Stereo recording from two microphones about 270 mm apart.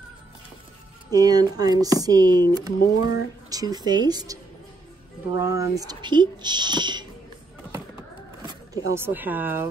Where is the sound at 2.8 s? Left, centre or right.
Left.